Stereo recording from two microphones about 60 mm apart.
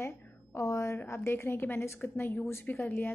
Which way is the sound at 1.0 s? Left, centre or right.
Left.